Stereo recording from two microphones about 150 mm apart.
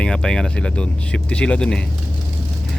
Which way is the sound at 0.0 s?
5° left (ahead or behind).